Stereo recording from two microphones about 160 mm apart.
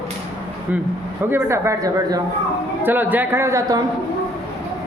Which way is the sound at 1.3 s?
15° right (ahead or behind).